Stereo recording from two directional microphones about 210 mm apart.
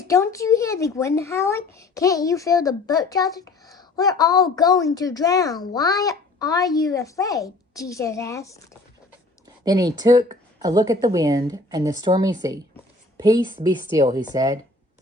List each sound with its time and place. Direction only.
0.1 s a child's voice: 15° left (ahead or behind)
9.6 s speech: 15° right (ahead or behind)